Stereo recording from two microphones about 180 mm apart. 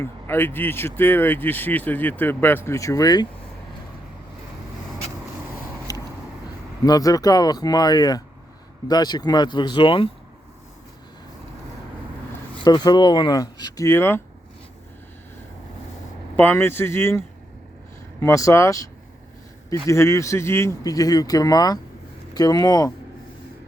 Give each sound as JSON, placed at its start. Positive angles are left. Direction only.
{"t": 0.0, "sound": "speech", "side_deg": 10}
{"t": 5.9, "sound": "vehicle", "side_deg": 20}
{"t": 6.8, "sound": "speech", "side_deg": 20}
{"t": 12.6, "sound": "speech", "side_deg": 25}
{"t": 16.3, "sound": "speech", "side_deg": 10}
{"t": 19.9, "sound": "speech", "side_deg": 15}